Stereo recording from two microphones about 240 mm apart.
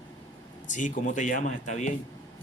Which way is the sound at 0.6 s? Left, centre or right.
Left.